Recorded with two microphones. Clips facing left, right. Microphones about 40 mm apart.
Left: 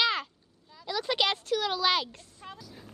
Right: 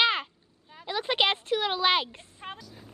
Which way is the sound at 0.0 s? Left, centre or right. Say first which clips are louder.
Right 3 dB; right.